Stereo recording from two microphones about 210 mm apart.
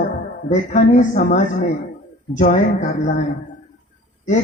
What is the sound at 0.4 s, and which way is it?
Speech, 35° left (ahead or behind).